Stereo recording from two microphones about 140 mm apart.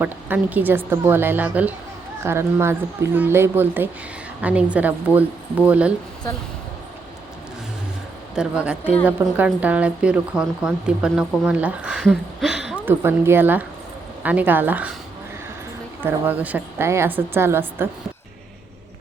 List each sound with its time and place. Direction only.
0.0 s speech: 15° right (ahead or behind)
8.4 s speech: 10° right (ahead or behind)
12.0 s a sound: centre (ahead or behind)
12.8 s speech: 15° right (ahead or behind)
16.0 s speech: 15° right (ahead or behind)